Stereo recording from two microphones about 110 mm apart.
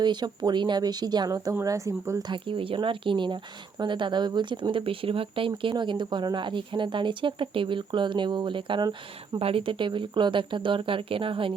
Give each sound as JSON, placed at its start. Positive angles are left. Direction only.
{"t": 0.0, "sound": "speech", "side_deg": -40}
{"t": 2.3, "sound": "speech", "side_deg": -50}
{"t": 9.4, "sound": "speech", "side_deg": -60}